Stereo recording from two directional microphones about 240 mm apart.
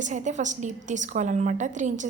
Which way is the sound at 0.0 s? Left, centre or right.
Right.